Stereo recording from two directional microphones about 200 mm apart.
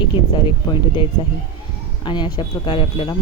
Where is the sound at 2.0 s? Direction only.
20° left (ahead or behind).